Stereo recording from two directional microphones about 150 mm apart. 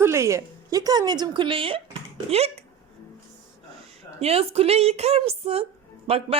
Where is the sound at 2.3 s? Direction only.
45° right (ahead or behind).